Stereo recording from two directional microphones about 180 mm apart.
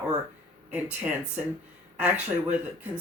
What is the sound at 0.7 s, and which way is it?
Speech, 10° right (ahead or behind).